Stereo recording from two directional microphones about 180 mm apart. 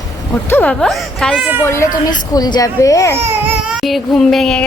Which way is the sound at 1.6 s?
15° left (ahead or behind).